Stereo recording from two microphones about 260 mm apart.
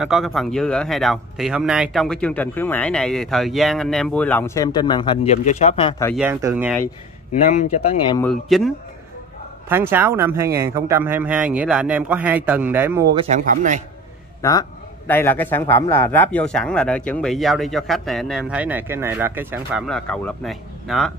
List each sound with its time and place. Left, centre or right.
0.0 s speech: centre
6.1 s speech: centre
8.2 s speech: centre
13.1 s a man's voice: right
14.4 s speech: centre
19.9 s speech: centre